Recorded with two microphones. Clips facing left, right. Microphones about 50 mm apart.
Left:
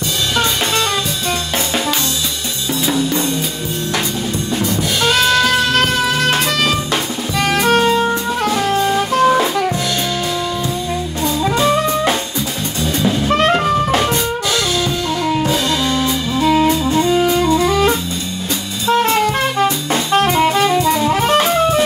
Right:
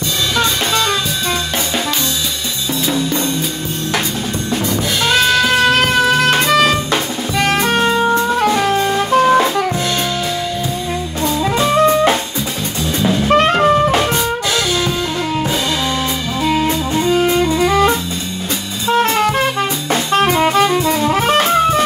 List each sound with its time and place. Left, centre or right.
5.0 s music: centre
7.3 s drum kit: centre
8.4 s jazz: centre
17.1 s music: centre
20.2 s saxophone: centre